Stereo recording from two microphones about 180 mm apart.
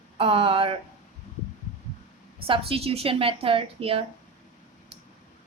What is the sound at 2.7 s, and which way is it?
Speech, 35° right (ahead or behind).